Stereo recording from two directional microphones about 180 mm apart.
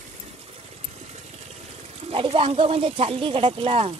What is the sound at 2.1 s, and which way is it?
Speech, 30° right (ahead or behind).